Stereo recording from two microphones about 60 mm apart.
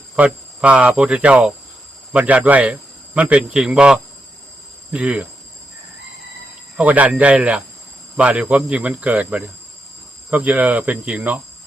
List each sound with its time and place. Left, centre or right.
0.2 s speech: right
3.5 s speech: centre
4.9 s speech: right
6.7 s speech: right